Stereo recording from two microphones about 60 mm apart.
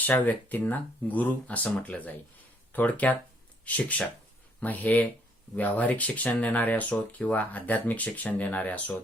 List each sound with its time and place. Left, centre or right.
0.0 s speech: left